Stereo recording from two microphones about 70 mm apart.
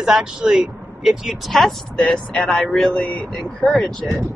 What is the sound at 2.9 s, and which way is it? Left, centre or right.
Speech, left.